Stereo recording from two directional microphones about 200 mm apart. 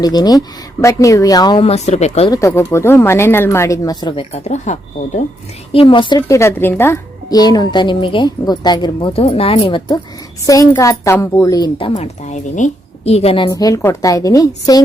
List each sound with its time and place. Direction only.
0.0 s a woman's voice: 20° left (ahead or behind)
2.3 s speech: 15° left (ahead or behind); by 5.2 s 35° left (ahead or behind)
5.7 s a woman's voice: 25° left (ahead or behind)
11.9 s a woman's voice: 35° left (ahead or behind); by 14.8 s 15° left (ahead or behind)